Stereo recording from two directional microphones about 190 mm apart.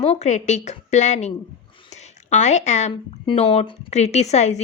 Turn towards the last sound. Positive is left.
turn(degrees=35)  # may be behind; listen again after turning